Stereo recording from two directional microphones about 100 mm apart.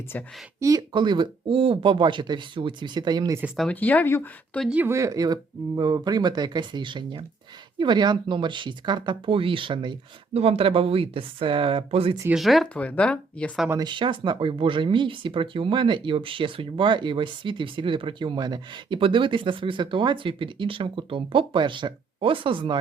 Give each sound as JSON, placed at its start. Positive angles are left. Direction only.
{"t": 0.6, "sound": "speech", "side_deg": -35}
{"t": 0.9, "sound": "speech", "side_deg": -50}
{"t": 3.7, "sound": "speech", "side_deg": 15}
{"t": 4.9, "sound": "speech", "side_deg": -30}
{"t": 10.3, "sound": "speech", "side_deg": -85}
{"t": 12.3, "sound": "speech", "side_deg": 0}
{"t": 12.7, "sound": "speech", "side_deg": 10}
{"t": 13.7, "sound": "speech", "side_deg": -50}